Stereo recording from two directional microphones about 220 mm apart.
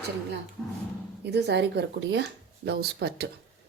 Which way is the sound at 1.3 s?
50° right (ahead or behind).